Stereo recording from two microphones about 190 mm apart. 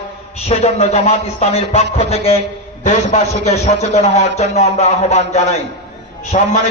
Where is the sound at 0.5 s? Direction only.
35° left (ahead or behind).